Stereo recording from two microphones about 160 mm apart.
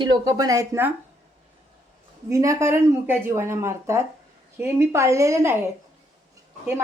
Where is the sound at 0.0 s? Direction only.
25° right (ahead or behind).